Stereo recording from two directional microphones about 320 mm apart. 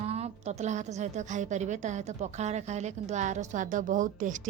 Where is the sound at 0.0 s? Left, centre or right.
Centre.